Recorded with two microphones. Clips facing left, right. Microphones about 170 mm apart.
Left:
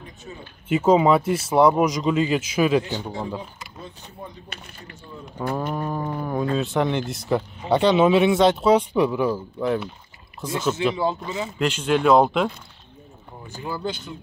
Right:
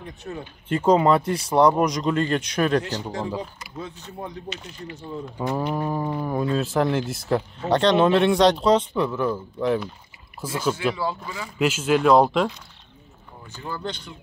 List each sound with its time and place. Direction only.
0.0 s speech: 65° right (ahead or behind)
0.7 s speech: 5° left (ahead or behind)
2.8 s speech: 90° right
4.5 s speech: 55° left (ahead or behind)
5.6 s speech: 5° right (ahead or behind)
10.6 s speech: 10° right (ahead or behind)
11.2 s speech: 25° left (ahead or behind)
11.5 s speech: 5° right (ahead or behind)
13.6 s speech: 10° left (ahead or behind)